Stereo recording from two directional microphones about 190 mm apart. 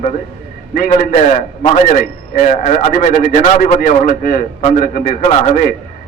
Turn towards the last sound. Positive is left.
turn(degrees=40)  # may be behind; listen again after turning